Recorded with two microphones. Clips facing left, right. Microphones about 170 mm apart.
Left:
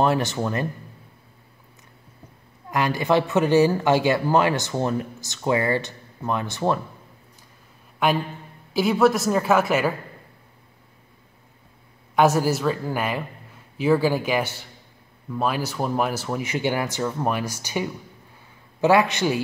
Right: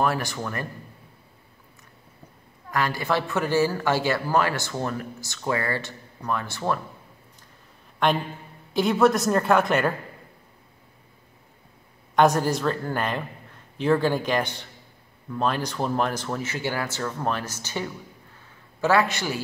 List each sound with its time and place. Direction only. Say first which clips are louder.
0.0 s speech: left 4 dB; 25° left (ahead or behind)
2.7 s speech: left 4 dB; 20° left (ahead or behind)
8.0 s a woman's voice: left 1 dB; 5° left (ahead or behind)
12.2 s speech: left 1 dB; 5° left (ahead or behind)